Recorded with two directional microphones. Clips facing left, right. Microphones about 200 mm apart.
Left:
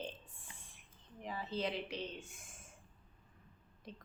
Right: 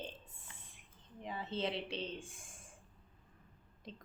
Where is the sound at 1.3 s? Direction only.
25° right (ahead or behind).